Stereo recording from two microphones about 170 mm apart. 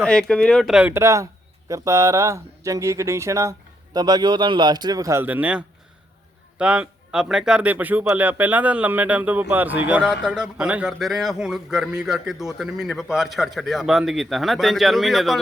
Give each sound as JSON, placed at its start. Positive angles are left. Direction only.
{"t": 0.0, "sound": "speech", "side_deg": 5}